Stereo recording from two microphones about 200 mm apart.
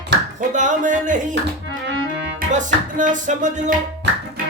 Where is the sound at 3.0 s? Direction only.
40° right (ahead or behind).